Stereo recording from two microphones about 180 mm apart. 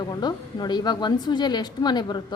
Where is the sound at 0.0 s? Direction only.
25° left (ahead or behind).